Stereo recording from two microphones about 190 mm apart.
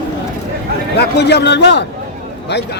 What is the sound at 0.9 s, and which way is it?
Speech, 60° left (ahead or behind).